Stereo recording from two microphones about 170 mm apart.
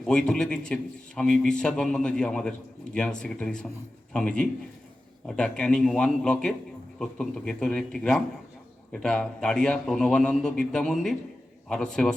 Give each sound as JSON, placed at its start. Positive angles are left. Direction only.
{"t": 0.0, "sound": "a man's voice", "side_deg": 5}